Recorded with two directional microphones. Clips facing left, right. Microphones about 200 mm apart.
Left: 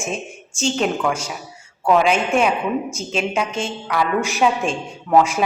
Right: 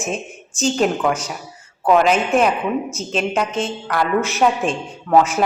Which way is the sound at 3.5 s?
35° right (ahead or behind).